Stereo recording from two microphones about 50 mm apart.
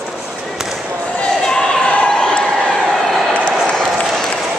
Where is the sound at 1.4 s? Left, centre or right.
Centre.